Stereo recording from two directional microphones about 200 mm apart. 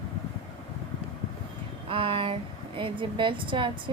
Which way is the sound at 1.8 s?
30° right (ahead or behind).